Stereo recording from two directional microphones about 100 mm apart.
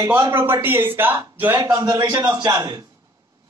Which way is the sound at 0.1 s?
25° right (ahead or behind).